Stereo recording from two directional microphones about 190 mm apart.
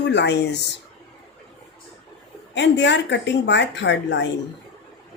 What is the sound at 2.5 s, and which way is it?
A woman's voice, 65° left (ahead or behind).